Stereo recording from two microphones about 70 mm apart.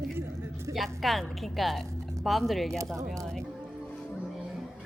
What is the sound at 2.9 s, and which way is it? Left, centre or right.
Speech, right.